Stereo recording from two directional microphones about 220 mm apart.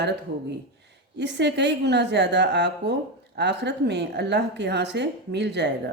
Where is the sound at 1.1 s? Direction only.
50° right (ahead or behind).